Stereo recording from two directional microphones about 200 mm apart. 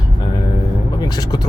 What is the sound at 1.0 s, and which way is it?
Speech, 20° left (ahead or behind).